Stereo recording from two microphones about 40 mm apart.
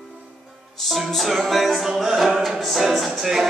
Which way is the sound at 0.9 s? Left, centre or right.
Centre.